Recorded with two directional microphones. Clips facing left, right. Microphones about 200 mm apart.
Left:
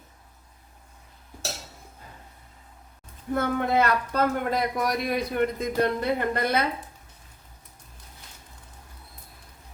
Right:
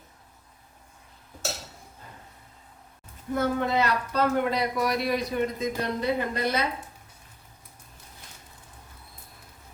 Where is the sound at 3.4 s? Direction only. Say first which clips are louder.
Left 1 dB; 55° left (ahead or behind).